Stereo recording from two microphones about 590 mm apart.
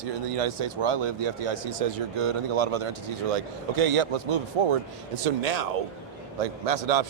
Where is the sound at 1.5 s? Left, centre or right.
Right.